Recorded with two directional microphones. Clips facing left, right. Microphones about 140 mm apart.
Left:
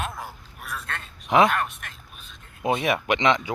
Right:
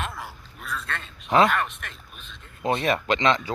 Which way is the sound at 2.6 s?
10° left (ahead or behind).